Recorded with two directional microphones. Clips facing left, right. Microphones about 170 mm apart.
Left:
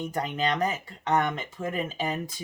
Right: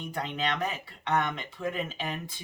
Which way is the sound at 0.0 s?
40° left (ahead or behind).